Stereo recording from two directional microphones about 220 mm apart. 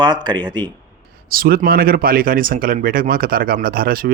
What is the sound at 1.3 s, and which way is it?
Speech, 40° right (ahead or behind).